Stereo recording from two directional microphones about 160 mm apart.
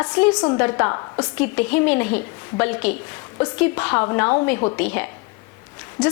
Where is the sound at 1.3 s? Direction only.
10° left (ahead or behind).